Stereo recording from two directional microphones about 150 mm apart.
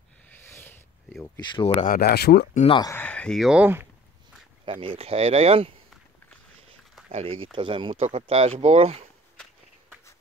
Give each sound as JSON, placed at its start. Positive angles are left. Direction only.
{"t": 0.5, "sound": "a sound", "side_deg": 15}
{"t": 1.2, "sound": "speech", "side_deg": 25}
{"t": 1.9, "sound": "speech", "side_deg": 85}
{"t": 2.8, "sound": "speech", "side_deg": 15}
{"t": 4.6, "sound": "speech", "side_deg": -35}
{"t": 7.1, "sound": "speech", "side_deg": -45}